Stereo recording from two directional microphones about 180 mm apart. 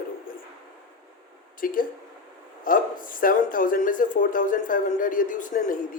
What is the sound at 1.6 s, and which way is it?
Speech, 50° left (ahead or behind).